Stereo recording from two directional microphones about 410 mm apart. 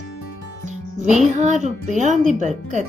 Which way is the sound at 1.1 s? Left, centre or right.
Centre.